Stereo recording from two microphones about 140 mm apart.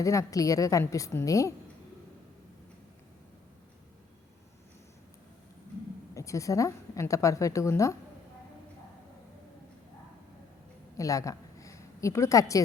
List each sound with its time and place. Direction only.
0.0 s a woman's voice: 20° left (ahead or behind)
6.1 s a woman's voice: 20° left (ahead or behind)
10.9 s a sound: 25° left (ahead or behind)